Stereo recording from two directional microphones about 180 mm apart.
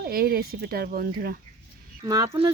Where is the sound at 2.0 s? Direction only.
20° right (ahead or behind).